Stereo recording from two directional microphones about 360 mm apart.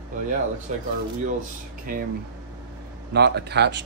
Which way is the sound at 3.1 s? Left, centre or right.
Right.